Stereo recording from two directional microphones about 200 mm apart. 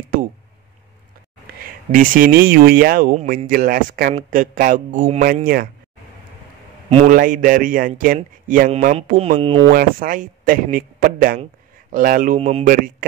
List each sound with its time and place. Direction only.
1.6 s speech: 45° right (ahead or behind)
7.1 s speech: 40° right (ahead or behind)
9.1 s speech: 30° right (ahead or behind)
9.7 s speech: 45° right (ahead or behind)
12.4 s speech: 30° right (ahead or behind)